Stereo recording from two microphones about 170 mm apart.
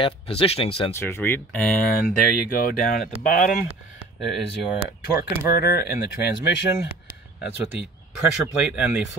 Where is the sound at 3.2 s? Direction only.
55° left (ahead or behind).